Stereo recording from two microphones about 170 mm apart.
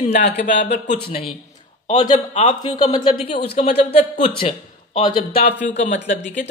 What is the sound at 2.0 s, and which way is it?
A woman's voice, 30° left (ahead or behind).